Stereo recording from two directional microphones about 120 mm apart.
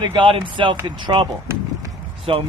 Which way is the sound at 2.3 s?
45° right (ahead or behind).